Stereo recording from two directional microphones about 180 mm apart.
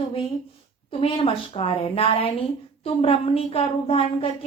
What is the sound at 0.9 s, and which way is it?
A woman's voice, 30° left (ahead or behind).